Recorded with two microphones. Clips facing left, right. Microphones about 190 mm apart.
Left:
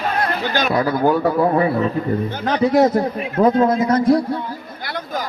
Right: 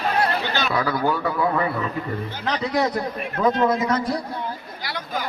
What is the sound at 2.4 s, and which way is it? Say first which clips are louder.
Speech: left 8 dB; 50° left (ahead or behind).